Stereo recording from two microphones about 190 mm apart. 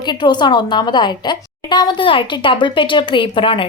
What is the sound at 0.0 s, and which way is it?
A woman's voice, 25° left (ahead or behind).